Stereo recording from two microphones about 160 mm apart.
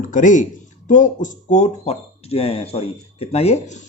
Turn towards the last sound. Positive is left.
turn(degrees=40)  # may be behind; listen again after turning